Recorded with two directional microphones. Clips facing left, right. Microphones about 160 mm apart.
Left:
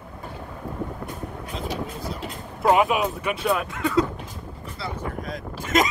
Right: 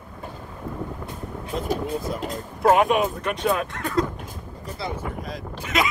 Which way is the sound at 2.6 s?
Centre (ahead or behind).